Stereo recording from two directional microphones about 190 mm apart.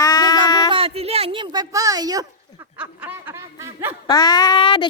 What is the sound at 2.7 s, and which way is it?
Snicker, 10° right (ahead or behind).